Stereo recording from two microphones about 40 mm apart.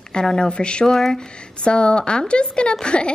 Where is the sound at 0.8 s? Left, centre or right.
Centre.